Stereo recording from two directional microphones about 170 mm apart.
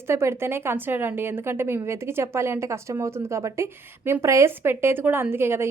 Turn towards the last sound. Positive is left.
turn(degrees=-15)  # may be behind; listen again after turning